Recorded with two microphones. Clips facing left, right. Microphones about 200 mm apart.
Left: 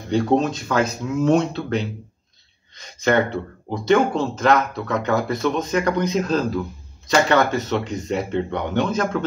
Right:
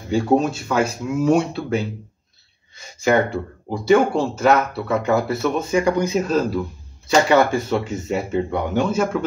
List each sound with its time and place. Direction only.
0.1 s speech: 10° right (ahead or behind)